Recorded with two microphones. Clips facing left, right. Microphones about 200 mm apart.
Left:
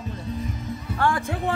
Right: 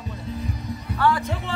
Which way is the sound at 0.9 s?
50° left (ahead or behind).